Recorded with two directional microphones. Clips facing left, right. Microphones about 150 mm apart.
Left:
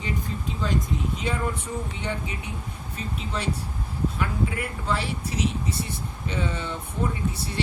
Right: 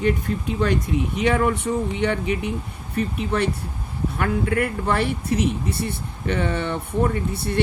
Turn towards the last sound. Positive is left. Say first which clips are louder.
# right 5 dB
turn(degrees=-60)  # may be behind; listen again after turning